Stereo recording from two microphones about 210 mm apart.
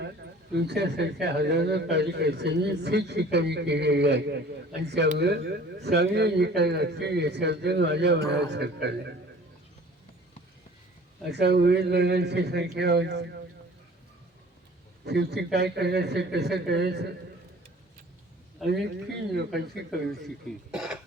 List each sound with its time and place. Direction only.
0.5 s a man's voice: 50° right (ahead or behind)
11.3 s a man's voice: 50° right (ahead or behind)
15.0 s a man's voice: 50° right (ahead or behind)
18.6 s speech: centre (ahead or behind)
19.9 s speech: centre (ahead or behind)